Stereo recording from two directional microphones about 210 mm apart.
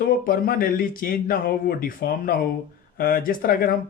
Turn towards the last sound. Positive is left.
turn(degrees=40)  # may be behind; listen again after turning